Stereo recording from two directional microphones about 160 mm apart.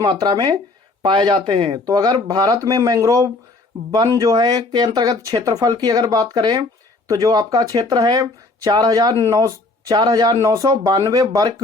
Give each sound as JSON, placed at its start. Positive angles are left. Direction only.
{"t": 0.0, "sound": "speech", "side_deg": -25}